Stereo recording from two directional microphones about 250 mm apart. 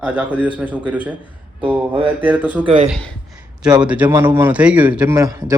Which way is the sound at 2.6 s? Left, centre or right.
Right.